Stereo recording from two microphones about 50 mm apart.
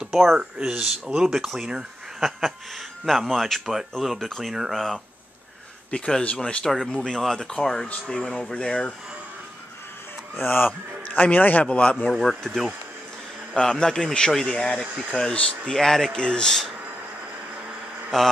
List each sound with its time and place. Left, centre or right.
0.0 s speech: centre
2.2 s speech: centre
5.9 s a man's voice: centre
8.5 s a man's voice: left
10.3 s a man's voice: left
12.1 s speech: centre
13.6 s a man's voice: centre
18.1 s a man's voice: centre